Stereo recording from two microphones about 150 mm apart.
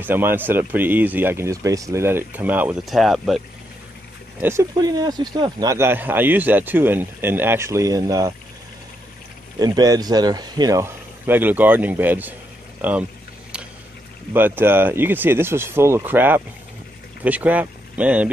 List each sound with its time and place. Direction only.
0.0 s speech: 15° right (ahead or behind)
2.8 s speech: centre (ahead or behind)
4.4 s speech: 15° right (ahead or behind)
4.7 s speech: 25° right (ahead or behind)
9.6 s speech: 25° right (ahead or behind)
14.3 s speech: 15° right (ahead or behind)